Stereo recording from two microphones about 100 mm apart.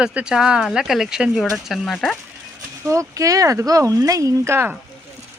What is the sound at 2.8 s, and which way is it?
Speech, 30° right (ahead or behind).